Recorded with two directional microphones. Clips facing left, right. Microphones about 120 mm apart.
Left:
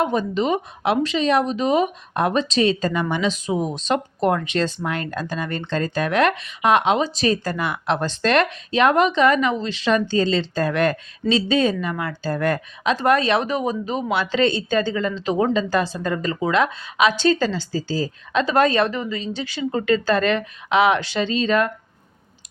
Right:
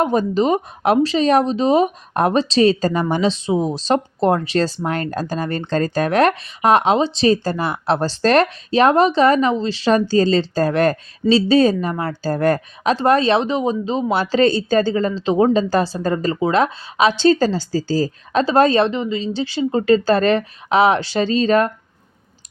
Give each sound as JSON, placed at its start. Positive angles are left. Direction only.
{"t": 0.0, "sound": "speech", "side_deg": -40}
{"t": 14.1, "sound": "speech", "side_deg": -35}